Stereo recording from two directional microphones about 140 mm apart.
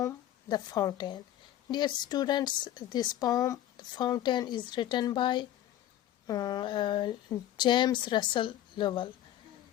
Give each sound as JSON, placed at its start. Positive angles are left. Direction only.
{"t": 0.0, "sound": "speech", "side_deg": 30}